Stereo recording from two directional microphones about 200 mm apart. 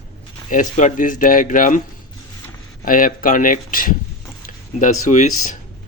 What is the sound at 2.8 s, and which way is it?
Speech, 45° left (ahead or behind).